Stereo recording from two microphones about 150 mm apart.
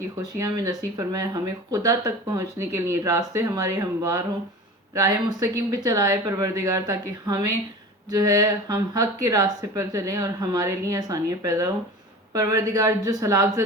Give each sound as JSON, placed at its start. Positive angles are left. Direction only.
{"t": 0.3, "sound": "speech", "side_deg": -25}